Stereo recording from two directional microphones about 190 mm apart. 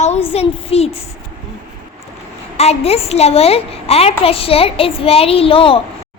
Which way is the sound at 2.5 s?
35° left (ahead or behind).